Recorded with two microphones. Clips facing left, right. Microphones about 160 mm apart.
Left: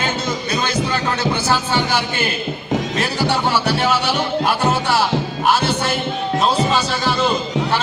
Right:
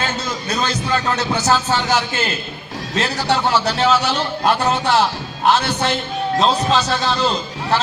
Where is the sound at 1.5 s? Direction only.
10° left (ahead or behind).